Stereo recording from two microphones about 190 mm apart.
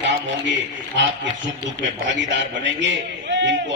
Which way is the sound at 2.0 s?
70° right (ahead or behind).